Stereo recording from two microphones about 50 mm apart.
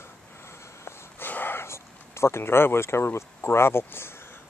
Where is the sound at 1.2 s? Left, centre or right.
Left.